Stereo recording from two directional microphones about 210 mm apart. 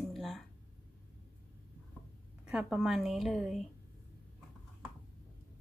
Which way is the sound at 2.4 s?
5° right (ahead or behind).